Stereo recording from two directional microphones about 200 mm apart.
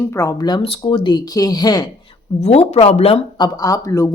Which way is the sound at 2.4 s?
30° left (ahead or behind).